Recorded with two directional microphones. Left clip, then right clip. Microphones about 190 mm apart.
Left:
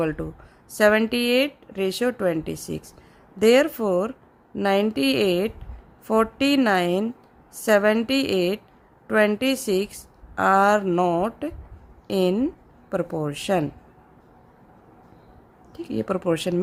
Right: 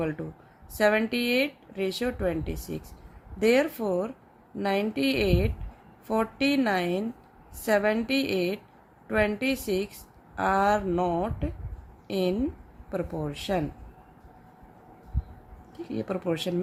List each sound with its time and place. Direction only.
0.0 s speech: 25° left (ahead or behind)
15.7 s speech: 30° left (ahead or behind)